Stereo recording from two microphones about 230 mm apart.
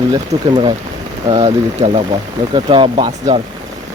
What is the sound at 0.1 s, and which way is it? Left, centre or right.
Speech, centre.